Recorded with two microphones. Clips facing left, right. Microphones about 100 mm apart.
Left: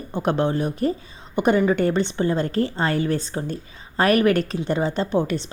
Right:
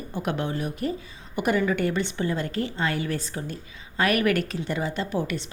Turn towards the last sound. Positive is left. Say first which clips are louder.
# left 6 dB
turn(degrees=30)  # may be behind; listen again after turning